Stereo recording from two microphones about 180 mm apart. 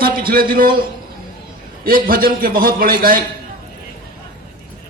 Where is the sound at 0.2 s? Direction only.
55° right (ahead or behind).